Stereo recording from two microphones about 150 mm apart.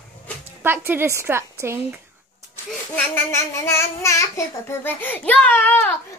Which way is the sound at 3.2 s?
20° left (ahead or behind).